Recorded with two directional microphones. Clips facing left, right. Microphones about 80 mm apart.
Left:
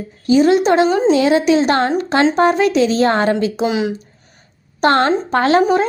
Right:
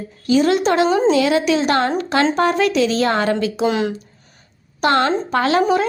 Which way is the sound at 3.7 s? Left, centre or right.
Centre.